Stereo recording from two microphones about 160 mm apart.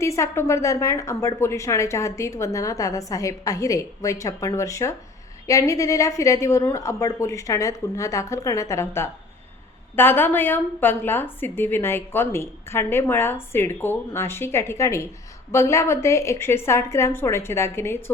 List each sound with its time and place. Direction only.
0.0 s a woman's voice: 15° left (ahead or behind)